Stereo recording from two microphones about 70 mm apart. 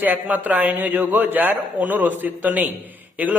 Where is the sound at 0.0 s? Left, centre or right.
Right.